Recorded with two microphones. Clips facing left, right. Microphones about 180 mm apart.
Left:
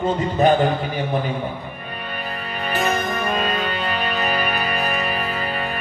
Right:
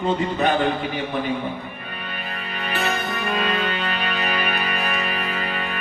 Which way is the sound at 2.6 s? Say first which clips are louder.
Left 4 dB; 40° left (ahead or behind).